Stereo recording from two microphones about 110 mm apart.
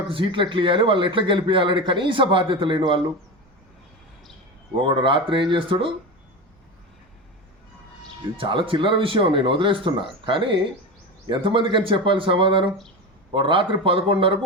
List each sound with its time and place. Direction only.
0.1 s a man's voice: 50° right (ahead or behind)
4.8 s a man's voice: 50° right (ahead or behind)
8.4 s a man's voice: 55° right (ahead or behind)